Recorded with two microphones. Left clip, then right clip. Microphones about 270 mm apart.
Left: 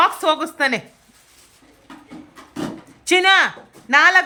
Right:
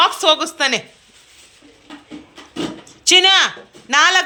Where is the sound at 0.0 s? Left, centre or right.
Centre.